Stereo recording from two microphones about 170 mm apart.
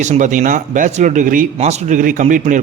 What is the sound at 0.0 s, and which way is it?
Speech, 45° right (ahead or behind).